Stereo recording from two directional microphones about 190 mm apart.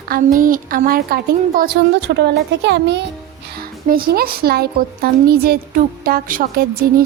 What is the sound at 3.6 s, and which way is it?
Speech, 50° right (ahead or behind).